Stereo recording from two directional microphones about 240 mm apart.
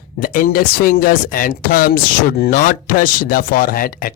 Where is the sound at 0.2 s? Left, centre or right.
Left.